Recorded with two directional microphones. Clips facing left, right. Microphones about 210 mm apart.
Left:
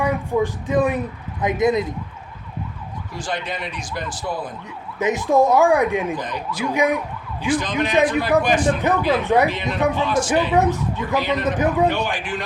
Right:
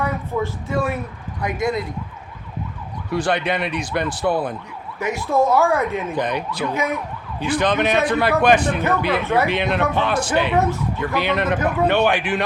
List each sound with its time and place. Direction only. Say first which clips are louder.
0.0 s speech: left 3 dB; 15° left (ahead or behind)
3.1 s a man's voice: right 7 dB; 65° right (ahead or behind)
4.9 s speech: left 3 dB; 20° left (ahead or behind)
6.1 s a man's voice: right 4 dB; 65° right (ahead or behind)
6.7 s speech: left 6 dB; 15° left (ahead or behind)
7.4 s a man's voice: right 2 dB; 65° right (ahead or behind)
9.2 s speech: left 2 dB; 15° left (ahead or behind)
9.5 s a man's voice: right 1 dB; 65° right (ahead or behind)
10.5 s speech: left 1 dB; 15° left (ahead or behind)
11.2 s a man's voice: right 3 dB; 65° right (ahead or behind)
11.5 s speech: left 1 dB; 20° left (ahead or behind)
11.9 s a man's voice: right 5 dB; 65° right (ahead or behind)